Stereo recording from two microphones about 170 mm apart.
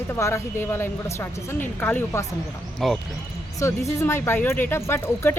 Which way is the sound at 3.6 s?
20° left (ahead or behind).